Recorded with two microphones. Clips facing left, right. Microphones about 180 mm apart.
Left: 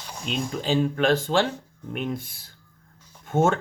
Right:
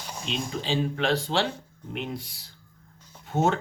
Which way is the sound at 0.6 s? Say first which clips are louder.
Left 5 dB; 45° left (ahead or behind).